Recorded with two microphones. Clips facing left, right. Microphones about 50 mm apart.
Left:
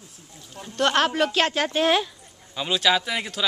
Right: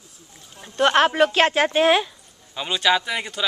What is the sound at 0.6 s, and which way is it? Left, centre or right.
Speech, centre.